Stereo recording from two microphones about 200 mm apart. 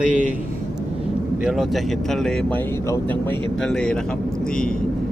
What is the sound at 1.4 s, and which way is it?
Speech, centre (ahead or behind).